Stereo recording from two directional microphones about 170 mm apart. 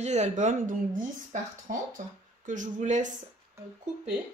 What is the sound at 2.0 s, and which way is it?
Speech, 45° right (ahead or behind).